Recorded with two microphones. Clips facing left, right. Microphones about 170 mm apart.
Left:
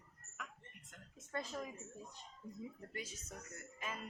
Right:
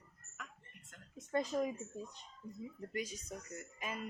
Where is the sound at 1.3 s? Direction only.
20° right (ahead or behind).